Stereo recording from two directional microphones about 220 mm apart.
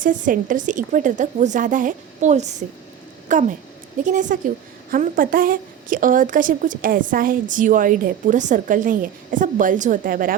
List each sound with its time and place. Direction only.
0.0 s a woman's voice: 35° right (ahead or behind)